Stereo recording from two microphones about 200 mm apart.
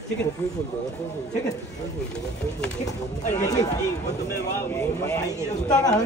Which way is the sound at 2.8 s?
15° left (ahead or behind).